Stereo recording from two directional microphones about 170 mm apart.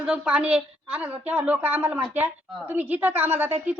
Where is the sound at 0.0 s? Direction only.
5° right (ahead or behind).